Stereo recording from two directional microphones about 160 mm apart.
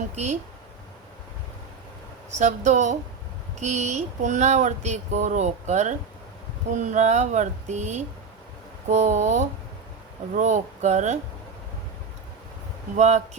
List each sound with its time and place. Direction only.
2.4 s speech: 45° right (ahead or behind)
13.0 s speech: 45° right (ahead or behind)